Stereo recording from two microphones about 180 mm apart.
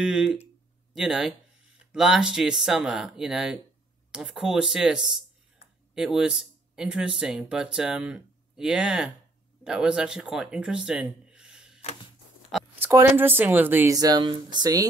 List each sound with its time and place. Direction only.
0.0 s speech: 5° right (ahead or behind)
11.8 s a sound: 35° left (ahead or behind)
12.4 s speech: 5° right (ahead or behind)